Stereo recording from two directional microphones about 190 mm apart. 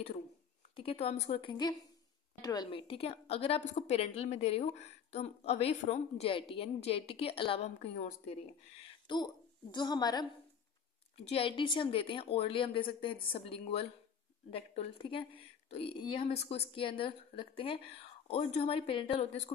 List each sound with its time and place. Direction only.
0.7 s a woman's voice: 30° left (ahead or behind)